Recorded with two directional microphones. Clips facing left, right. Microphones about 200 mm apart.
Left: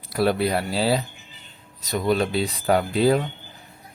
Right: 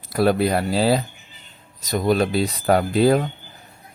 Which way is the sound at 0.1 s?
45° right (ahead or behind).